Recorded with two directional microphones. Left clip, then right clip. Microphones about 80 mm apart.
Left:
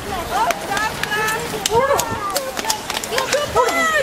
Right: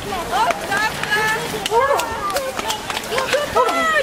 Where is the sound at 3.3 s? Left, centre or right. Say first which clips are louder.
Even; centre.